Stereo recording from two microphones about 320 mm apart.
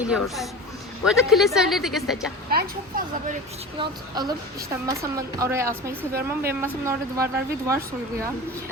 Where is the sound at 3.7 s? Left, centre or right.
Centre.